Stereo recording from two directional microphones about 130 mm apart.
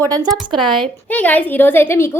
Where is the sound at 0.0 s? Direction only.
30° right (ahead or behind).